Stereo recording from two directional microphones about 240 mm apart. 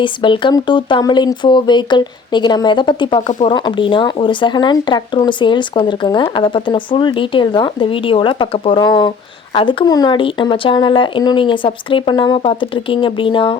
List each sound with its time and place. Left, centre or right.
0.0 s speech: centre